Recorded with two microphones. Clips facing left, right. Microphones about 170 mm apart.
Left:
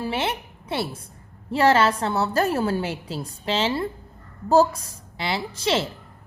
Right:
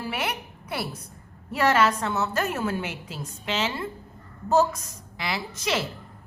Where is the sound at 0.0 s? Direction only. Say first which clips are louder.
Left 4 dB; 25° left (ahead or behind).